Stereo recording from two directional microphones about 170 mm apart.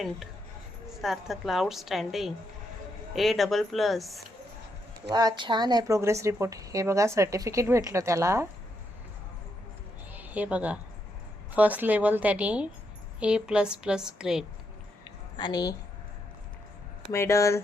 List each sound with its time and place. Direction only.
1.0 s a woman's voice: centre (ahead or behind)
5.0 s speech: 25° right (ahead or behind)
10.1 s a sound: 10° right (ahead or behind)
11.5 s a woman's voice: 10° right (ahead or behind)
15.4 s a woman's voice: 25° left (ahead or behind)
17.1 s speech: 15° left (ahead or behind)